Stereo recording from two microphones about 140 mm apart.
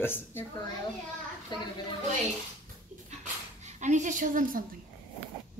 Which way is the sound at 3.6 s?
60° right (ahead or behind).